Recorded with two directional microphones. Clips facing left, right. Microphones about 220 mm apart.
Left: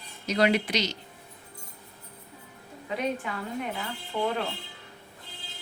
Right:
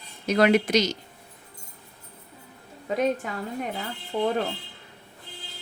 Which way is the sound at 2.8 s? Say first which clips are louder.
Right 5 dB; 45° right (ahead or behind).